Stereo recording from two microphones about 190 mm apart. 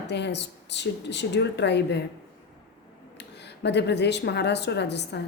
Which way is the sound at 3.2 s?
65° left (ahead or behind).